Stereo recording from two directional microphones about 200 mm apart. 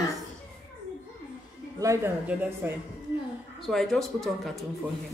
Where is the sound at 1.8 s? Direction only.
15° right (ahead or behind).